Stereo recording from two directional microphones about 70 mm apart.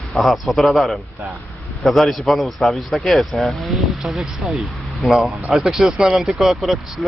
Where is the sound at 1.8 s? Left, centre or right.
Centre.